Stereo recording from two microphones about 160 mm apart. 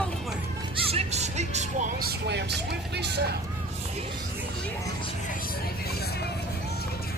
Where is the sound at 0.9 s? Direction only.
40° right (ahead or behind).